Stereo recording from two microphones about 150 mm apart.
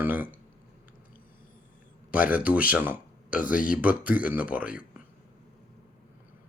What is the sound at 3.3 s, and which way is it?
Speech, 65° left (ahead or behind).